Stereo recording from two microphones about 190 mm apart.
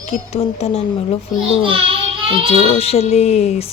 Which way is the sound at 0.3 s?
35° left (ahead or behind).